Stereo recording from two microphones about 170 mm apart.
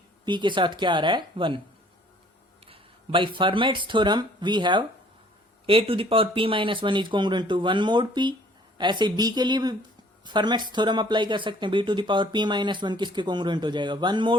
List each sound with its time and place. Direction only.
0.3 s speech: 30° right (ahead or behind)
2.6 s speech: 30° right (ahead or behind)